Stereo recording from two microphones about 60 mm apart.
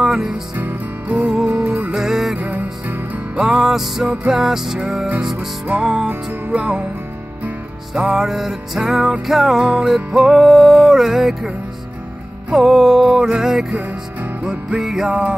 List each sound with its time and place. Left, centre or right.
0.0 s music: centre
0.6 s music: right
1.3 s music: centre
2.0 s music: centre
2.3 s music: right
3.3 s music: centre
6.0 s music: right
7.9 s music: centre
13.7 s music: right
14.4 s music: centre